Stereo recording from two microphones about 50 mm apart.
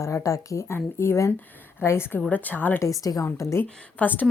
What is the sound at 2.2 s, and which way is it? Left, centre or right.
Speech, left.